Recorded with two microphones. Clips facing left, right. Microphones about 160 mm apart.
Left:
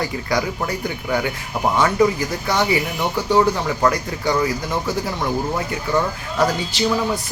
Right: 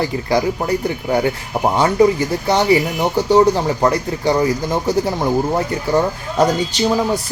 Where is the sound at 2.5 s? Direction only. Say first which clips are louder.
Right 5 dB; 30° right (ahead or behind).